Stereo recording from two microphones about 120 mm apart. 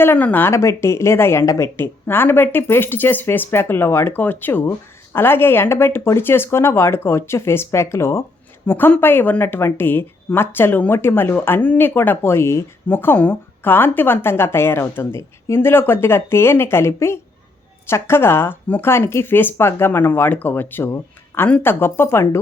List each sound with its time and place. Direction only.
0.0 s a woman's voice: 15° left (ahead or behind)